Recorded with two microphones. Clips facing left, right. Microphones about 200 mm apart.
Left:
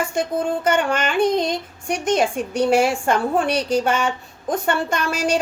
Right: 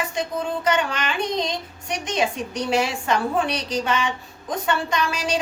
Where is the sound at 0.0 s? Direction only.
50° left (ahead or behind).